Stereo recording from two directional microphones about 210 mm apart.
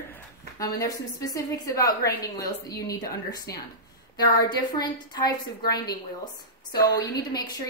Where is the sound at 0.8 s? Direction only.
15° left (ahead or behind).